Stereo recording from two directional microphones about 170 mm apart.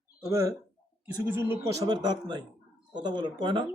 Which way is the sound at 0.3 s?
15° right (ahead or behind).